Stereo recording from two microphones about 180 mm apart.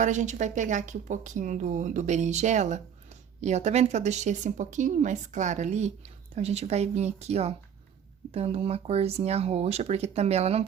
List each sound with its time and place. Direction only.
0.0 s speech: 40° right (ahead or behind)